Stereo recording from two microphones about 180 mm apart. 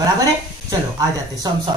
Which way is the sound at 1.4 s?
25° right (ahead or behind).